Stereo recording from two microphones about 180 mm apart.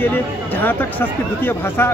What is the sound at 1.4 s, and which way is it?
Speech, 10° left (ahead or behind).